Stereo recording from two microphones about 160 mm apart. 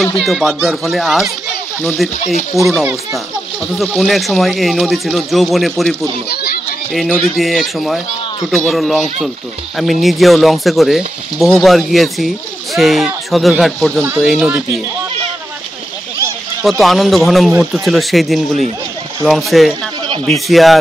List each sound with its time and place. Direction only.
0.2 s speech: centre (ahead or behind)
2.7 s speech: 10° right (ahead or behind)
3.7 s speech: 5° left (ahead or behind)
6.2 s speech: 85° left
6.9 s speech: centre (ahead or behind)
13.9 s speech: 15° right (ahead or behind)
14.2 s speech: centre (ahead or behind)
16.6 s speech: centre (ahead or behind)